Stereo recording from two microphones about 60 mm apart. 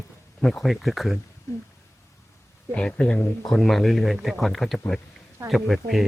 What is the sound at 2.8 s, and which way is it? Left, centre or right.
Speech, centre.